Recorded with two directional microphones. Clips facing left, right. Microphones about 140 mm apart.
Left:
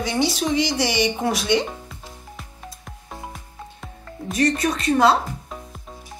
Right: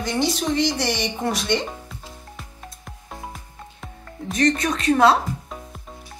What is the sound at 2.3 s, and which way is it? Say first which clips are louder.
Music: left 1 dB; centre (ahead or behind).